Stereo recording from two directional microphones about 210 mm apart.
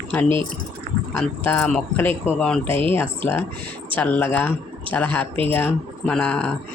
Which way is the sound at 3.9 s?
5° left (ahead or behind).